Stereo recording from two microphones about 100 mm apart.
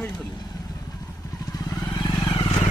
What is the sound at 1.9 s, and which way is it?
Vehicle, 45° left (ahead or behind).